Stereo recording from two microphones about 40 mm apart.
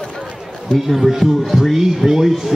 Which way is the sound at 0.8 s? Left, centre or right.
Centre.